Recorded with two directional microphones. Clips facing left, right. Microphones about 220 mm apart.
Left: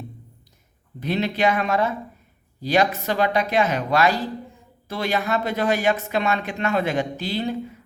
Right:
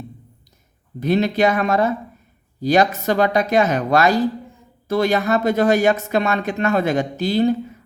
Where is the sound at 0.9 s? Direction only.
45° right (ahead or behind).